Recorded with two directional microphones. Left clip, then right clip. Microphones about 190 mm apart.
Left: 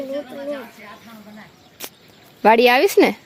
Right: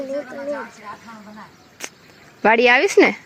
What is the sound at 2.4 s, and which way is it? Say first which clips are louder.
Speech: left 1 dB; 10° left (ahead or behind).